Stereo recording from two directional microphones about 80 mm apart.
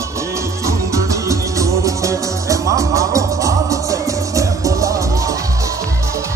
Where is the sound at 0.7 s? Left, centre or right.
Right.